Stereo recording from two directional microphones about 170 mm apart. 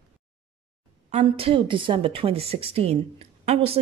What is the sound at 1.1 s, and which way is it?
Speech, 35° right (ahead or behind).